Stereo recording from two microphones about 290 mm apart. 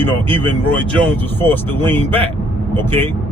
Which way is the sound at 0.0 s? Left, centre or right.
Centre.